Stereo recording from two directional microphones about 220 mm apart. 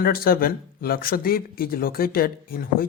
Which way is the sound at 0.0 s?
40° left (ahead or behind).